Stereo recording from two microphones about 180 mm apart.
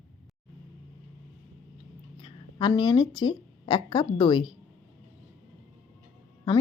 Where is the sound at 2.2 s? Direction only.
25° left (ahead or behind).